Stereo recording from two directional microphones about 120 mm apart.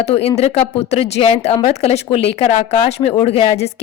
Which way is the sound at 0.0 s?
60° left (ahead or behind).